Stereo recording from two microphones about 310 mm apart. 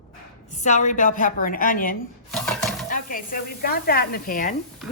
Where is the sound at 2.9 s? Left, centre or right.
Left.